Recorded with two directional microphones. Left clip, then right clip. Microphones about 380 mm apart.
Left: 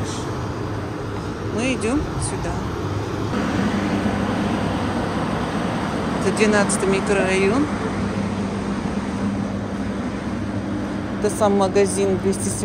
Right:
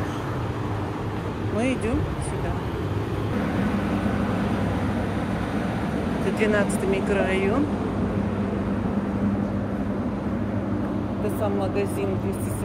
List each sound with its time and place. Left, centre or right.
3.9 s vehicle: left
6.4 s speech: centre
11.4 s speech: centre